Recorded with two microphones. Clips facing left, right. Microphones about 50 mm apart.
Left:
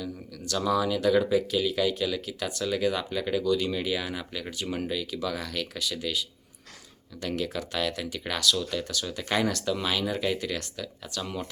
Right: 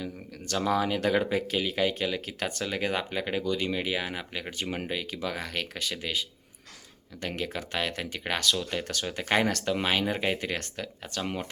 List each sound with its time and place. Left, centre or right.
0.0 s speech: right